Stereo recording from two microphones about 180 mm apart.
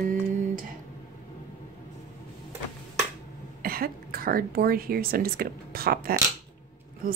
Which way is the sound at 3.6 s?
55° right (ahead or behind).